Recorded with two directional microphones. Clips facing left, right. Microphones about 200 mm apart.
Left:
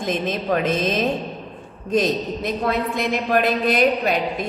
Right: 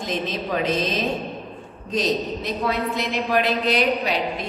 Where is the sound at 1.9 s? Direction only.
50° left (ahead or behind).